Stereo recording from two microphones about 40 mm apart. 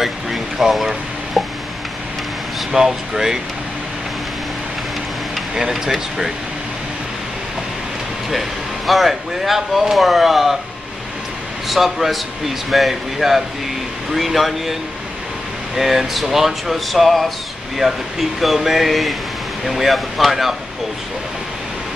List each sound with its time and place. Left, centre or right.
0.0 s music: centre
2.7 s speech: centre
5.5 s speech: centre
8.3 s speech: centre
11.6 s speech: centre
18.4 s speech: centre